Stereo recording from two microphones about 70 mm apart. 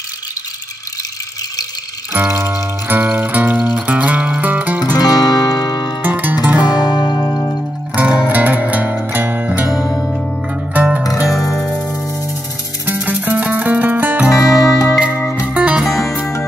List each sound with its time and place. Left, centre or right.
2.2 s music: right
4.9 s music: left
6.0 s music: right
6.7 s music: left
7.2 s music: left
7.9 s music: right
9.7 s music: left
10.7 s music: right
11.1 s music: left
12.8 s music: right
14.4 s music: left
15.4 s music: centre
15.8 s music: centre